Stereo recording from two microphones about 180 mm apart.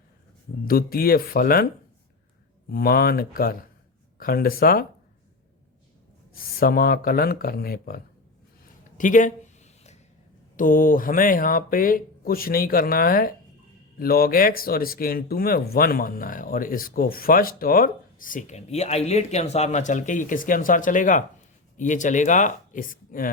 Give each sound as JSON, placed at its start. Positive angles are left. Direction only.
{"t": 0.7, "sound": "speech", "side_deg": 55}
{"t": 2.6, "sound": "speech", "side_deg": 55}
{"t": 6.3, "sound": "speech", "side_deg": 55}
{"t": 9.0, "sound": "a sound", "side_deg": 45}
{"t": 10.6, "sound": "speech", "side_deg": 50}